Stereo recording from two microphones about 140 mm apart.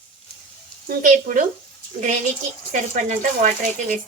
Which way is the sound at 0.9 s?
65° right (ahead or behind).